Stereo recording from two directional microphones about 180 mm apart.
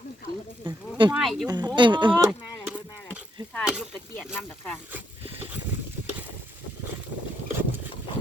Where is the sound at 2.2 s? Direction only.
15° right (ahead or behind).